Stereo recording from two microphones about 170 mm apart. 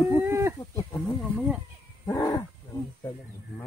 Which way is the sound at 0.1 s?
15° right (ahead or behind).